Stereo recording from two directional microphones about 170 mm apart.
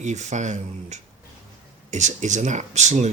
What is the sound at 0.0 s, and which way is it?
Speech, 45° right (ahead or behind).